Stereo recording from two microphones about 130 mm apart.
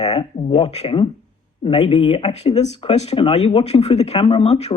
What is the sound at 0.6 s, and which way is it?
Speech, 50° left (ahead or behind).